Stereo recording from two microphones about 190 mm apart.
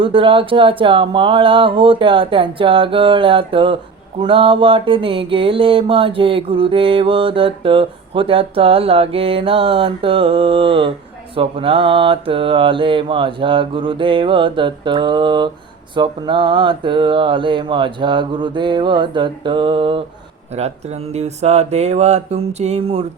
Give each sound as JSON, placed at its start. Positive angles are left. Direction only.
{"t": 0.0, "sound": "mantra", "side_deg": -25}
{"t": 20.6, "sound": "speech", "side_deg": -35}